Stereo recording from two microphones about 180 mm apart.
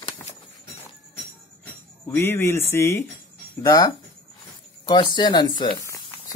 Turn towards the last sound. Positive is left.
turn(degrees=15)  # may be behind; listen again after turning